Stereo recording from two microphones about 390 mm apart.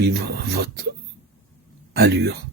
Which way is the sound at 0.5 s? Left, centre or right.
Right.